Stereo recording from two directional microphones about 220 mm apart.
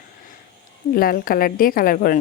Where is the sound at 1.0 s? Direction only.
40° left (ahead or behind).